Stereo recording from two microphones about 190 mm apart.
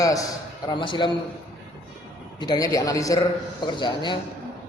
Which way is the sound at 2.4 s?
20° left (ahead or behind).